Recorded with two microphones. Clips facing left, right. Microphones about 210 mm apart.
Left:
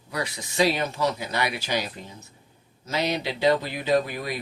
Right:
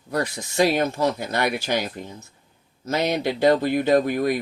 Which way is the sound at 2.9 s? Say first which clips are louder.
Right 4 dB; 50° right (ahead or behind).